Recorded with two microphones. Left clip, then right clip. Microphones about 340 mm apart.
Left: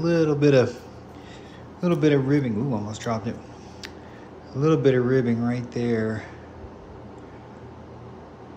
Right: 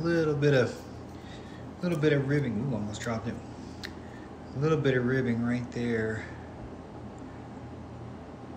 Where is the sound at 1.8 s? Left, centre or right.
Centre.